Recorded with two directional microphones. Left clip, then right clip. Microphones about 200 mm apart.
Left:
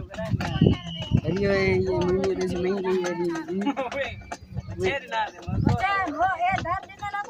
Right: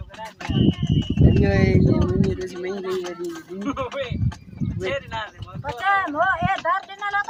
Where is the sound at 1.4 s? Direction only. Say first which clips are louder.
Left 2 dB; 10° left (ahead or behind).